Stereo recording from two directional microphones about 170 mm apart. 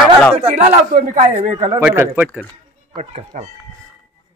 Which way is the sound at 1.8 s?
15° right (ahead or behind).